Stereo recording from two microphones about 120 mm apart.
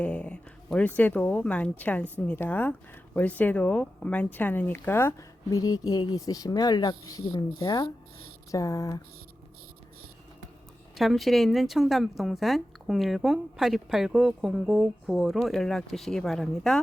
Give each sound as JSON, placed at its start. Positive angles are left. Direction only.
{"t": 0.0, "sound": "speech", "side_deg": 10}
{"t": 5.5, "sound": "speech", "side_deg": 30}
{"t": 10.9, "sound": "a woman's voice", "side_deg": 0}